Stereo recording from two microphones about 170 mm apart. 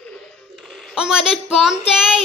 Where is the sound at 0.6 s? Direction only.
Centre (ahead or behind).